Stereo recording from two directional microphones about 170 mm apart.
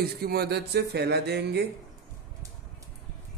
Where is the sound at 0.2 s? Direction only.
65° right (ahead or behind).